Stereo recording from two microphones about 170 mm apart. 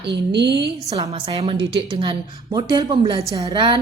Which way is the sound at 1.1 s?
35° right (ahead or behind).